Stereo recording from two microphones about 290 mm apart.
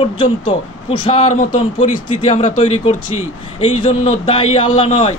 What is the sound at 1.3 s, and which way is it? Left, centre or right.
Speech, left.